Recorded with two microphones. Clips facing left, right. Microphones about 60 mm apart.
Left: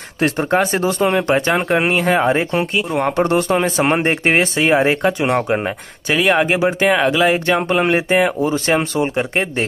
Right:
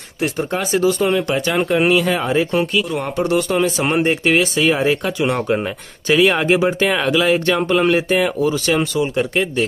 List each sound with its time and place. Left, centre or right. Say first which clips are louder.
0.2 s speech: left 5 dB; left
6.1 s speech: right 1 dB; centre; by 9.7 s left